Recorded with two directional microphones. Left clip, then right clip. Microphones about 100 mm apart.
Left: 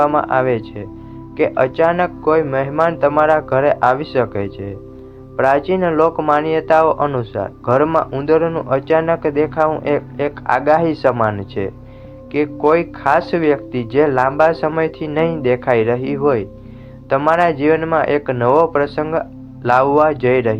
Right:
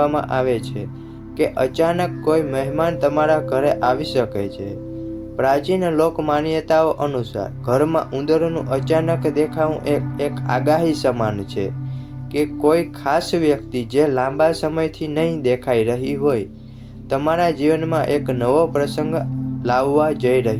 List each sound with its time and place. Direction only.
0.0 s speech: 35° right (ahead or behind)
7.9 s speech: 40° right (ahead or behind)